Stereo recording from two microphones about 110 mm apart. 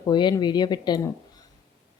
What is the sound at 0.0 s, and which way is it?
Speech, 45° left (ahead or behind).